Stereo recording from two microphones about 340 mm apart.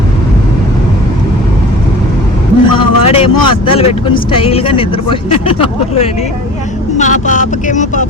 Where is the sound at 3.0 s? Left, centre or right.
Centre.